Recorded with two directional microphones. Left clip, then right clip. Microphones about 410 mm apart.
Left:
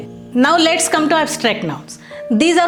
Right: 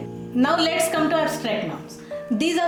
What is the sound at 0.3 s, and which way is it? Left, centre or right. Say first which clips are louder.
A woman's voice: left 7 dB; left.